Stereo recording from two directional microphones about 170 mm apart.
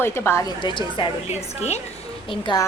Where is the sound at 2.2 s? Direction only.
30° left (ahead or behind).